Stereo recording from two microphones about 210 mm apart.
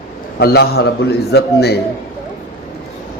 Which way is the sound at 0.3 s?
50° left (ahead or behind).